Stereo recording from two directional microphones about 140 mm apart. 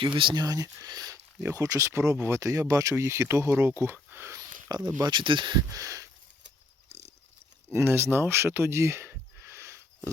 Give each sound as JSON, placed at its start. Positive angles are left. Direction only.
{"t": 0.0, "sound": "speech", "side_deg": -35}
{"t": 0.4, "sound": "speech", "side_deg": -25}
{"t": 4.9, "sound": "speech", "side_deg": -30}
{"t": 7.7, "sound": "a sound", "side_deg": -20}